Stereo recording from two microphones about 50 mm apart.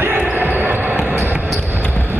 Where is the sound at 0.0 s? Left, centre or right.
Right.